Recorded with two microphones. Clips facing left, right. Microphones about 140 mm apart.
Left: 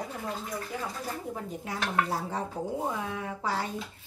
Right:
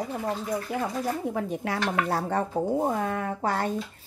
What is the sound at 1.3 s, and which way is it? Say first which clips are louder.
Speech: right 7 dB; 75° right (ahead or behind).